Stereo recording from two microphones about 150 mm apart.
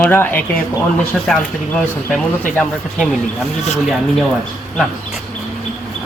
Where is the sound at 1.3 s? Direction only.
Centre (ahead or behind).